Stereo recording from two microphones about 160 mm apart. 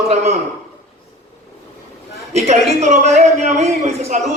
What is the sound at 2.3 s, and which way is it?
A man's voice, 45° right (ahead or behind).